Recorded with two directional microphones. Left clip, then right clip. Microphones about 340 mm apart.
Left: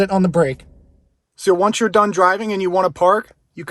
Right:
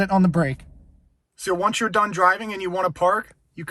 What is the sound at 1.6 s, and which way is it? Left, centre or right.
Speech, centre.